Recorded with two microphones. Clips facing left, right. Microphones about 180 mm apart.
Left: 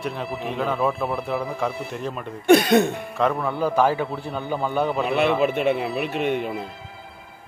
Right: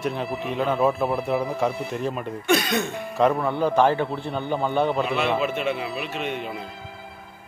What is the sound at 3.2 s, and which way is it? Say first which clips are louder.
Speech: right 2 dB; centre (ahead or behind).